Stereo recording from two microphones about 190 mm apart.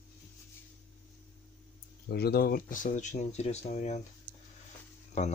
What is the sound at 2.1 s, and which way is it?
Speech, 55° left (ahead or behind).